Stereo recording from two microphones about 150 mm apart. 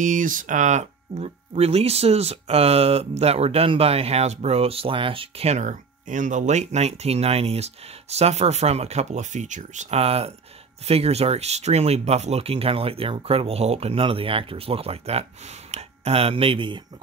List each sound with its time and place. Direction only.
0.0 s speech: 60° right (ahead or behind); by 16.8 s 35° right (ahead or behind)